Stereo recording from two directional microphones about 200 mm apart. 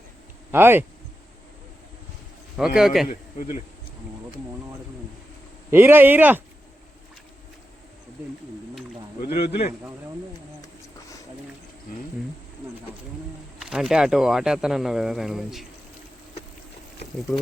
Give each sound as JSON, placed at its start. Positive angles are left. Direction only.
{"t": 0.5, "sound": "speech", "side_deg": -10}
{"t": 2.6, "sound": "speech", "side_deg": -5}
{"t": 3.1, "sound": "speech", "side_deg": 45}
{"t": 5.7, "sound": "speech", "side_deg": -10}
{"t": 9.2, "sound": "speech", "side_deg": 55}
{"t": 13.6, "sound": "speech", "side_deg": 0}